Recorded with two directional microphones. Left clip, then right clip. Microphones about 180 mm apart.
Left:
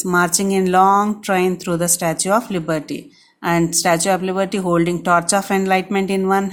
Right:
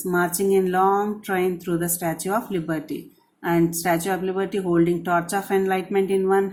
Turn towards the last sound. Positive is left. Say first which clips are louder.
# left 2 dB
turn(degrees=35)  # may be behind; listen again after turning